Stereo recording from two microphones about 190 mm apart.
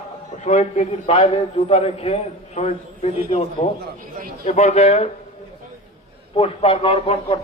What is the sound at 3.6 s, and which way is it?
A man's voice, 40° left (ahead or behind).